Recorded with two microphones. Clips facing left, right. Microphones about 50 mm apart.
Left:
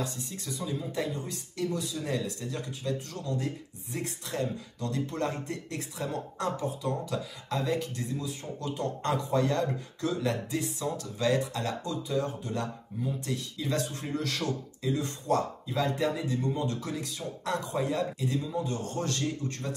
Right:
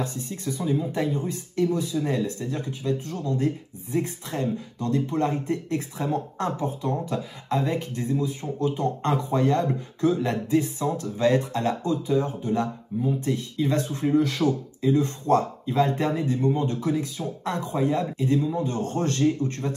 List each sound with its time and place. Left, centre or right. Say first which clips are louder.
0.0 s speech: right 6 dB; right
15.2 s speech: right 2 dB; right